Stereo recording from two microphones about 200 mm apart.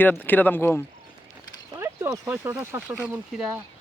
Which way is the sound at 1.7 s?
15° right (ahead or behind).